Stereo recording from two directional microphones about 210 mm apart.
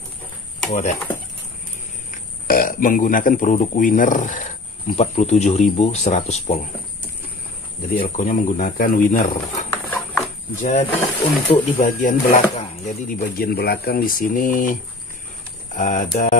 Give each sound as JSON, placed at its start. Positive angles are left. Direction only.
{"t": 0.7, "sound": "speech", "side_deg": 35}
{"t": 2.0, "sound": "speech", "side_deg": 45}
{"t": 7.9, "sound": "speech", "side_deg": 40}
{"t": 9.7, "sound": "horse", "side_deg": 10}
{"t": 10.5, "sound": "speech", "side_deg": 35}